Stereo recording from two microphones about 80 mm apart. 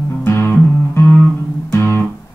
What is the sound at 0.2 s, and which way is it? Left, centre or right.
Music, left.